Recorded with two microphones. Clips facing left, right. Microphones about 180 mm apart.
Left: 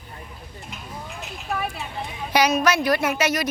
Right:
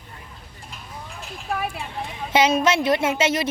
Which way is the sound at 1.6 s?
10° right (ahead or behind).